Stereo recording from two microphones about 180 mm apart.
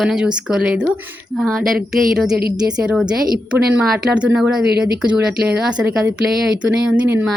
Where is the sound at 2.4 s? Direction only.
55° right (ahead or behind).